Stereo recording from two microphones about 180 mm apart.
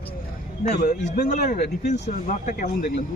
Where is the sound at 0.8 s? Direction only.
45° left (ahead or behind).